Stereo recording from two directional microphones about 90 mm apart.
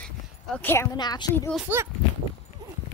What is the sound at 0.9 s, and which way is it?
Speech, 50° left (ahead or behind).